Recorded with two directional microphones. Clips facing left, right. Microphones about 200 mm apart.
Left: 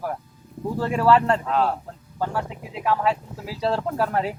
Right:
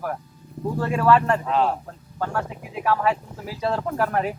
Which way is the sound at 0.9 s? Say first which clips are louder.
Even; 15° left (ahead or behind).